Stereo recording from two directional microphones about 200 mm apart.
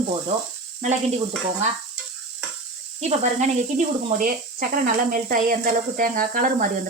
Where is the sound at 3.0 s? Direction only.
35° right (ahead or behind).